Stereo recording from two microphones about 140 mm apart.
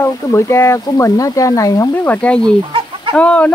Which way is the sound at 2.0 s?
10° left (ahead or behind).